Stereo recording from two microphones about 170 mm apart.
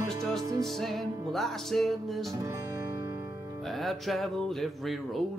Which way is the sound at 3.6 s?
Centre (ahead or behind).